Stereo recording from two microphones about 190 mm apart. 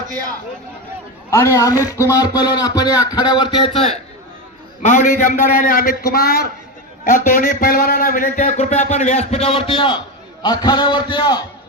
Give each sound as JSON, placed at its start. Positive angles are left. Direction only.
{"t": 1.3, "sound": "speech", "side_deg": 15}
{"t": 4.9, "sound": "a man's voice", "side_deg": 40}